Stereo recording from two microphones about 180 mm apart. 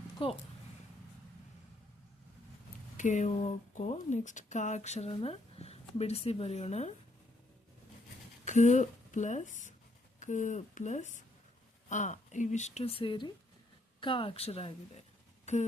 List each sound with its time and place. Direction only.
0.2 s speech: 30° left (ahead or behind)
3.0 s speech: 45° left (ahead or behind)
8.4 s speech: 40° left (ahead or behind)